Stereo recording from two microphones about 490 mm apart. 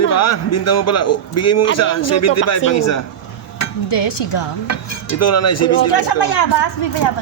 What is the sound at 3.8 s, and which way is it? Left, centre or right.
Dishes, left.